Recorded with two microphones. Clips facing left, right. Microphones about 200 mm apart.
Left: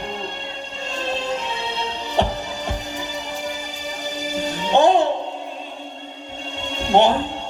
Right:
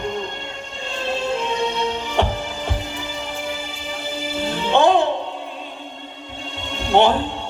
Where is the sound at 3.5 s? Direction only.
40° left (ahead or behind).